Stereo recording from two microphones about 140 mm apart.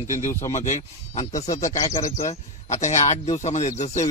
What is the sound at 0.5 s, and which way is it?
Speech, 60° left (ahead or behind).